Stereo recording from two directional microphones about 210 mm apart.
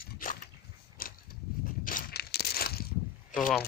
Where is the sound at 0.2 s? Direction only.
40° left (ahead or behind).